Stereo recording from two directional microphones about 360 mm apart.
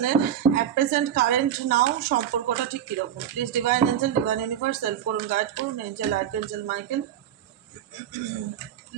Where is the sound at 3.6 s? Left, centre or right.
Right.